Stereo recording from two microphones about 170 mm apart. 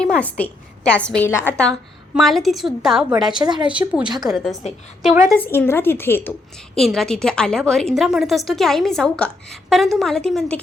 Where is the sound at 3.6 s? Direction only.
5° right (ahead or behind).